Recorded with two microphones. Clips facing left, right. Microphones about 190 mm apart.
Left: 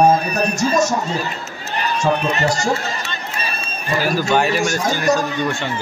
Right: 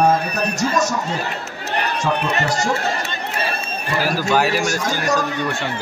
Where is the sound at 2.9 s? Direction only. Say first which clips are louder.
Right 3 dB; 60° right (ahead or behind).